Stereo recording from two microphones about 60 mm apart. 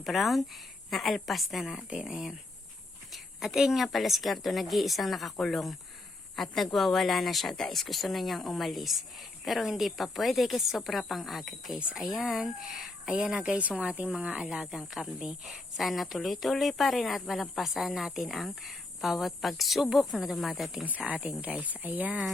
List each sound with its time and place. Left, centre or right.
0.0 s speech: centre
3.1 s a sound: centre
3.8 s speech: centre
13.6 s a woman's voice: right; by 20.8 s centre
21.1 s a woman's voice: right